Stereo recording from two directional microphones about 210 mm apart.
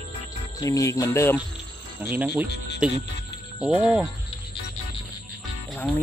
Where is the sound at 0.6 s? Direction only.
15° left (ahead or behind).